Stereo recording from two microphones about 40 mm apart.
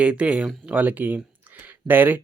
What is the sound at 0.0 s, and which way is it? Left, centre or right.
Speech, right.